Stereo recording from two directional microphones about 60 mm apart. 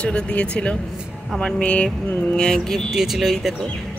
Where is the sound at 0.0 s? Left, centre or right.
Left.